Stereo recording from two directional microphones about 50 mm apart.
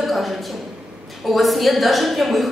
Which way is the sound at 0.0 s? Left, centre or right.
Centre.